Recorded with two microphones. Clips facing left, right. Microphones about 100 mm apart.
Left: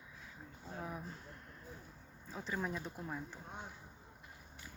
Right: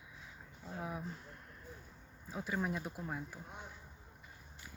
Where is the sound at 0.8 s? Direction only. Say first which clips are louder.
Right 2 dB; 10° right (ahead or behind).